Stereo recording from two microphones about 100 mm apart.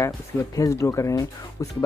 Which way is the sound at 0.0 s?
30° left (ahead or behind).